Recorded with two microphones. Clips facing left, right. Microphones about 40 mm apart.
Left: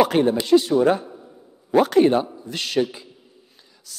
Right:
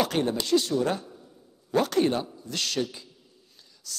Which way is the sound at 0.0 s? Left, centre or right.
Centre.